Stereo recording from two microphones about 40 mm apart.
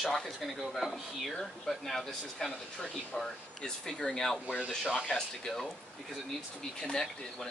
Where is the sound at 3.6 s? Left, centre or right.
Centre.